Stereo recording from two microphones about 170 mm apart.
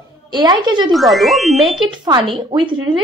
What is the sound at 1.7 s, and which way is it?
Speech, 25° right (ahead or behind).